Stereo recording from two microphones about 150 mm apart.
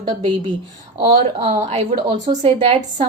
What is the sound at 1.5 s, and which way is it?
A woman's voice, 55° right (ahead or behind).